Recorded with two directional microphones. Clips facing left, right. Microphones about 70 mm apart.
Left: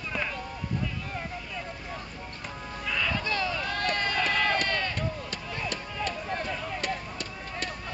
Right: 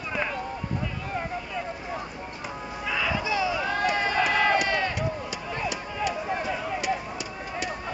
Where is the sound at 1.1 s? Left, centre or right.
Centre.